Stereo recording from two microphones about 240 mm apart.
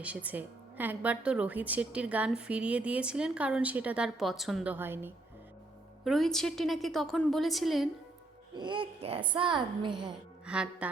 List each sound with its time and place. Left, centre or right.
0.0 s a woman's voice: centre
8.5 s speech: centre
10.4 s a woman's voice: centre